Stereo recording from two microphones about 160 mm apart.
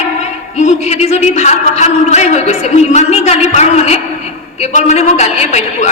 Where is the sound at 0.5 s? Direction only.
45° left (ahead or behind).